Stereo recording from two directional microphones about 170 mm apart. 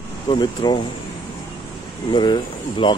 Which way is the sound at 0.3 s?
25° left (ahead or behind).